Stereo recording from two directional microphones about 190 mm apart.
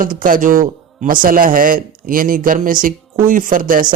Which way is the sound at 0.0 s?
45° right (ahead or behind).